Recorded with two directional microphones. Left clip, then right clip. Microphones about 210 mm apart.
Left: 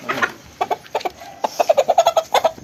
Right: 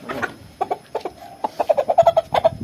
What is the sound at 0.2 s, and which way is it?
Chicken, 40° left (ahead or behind).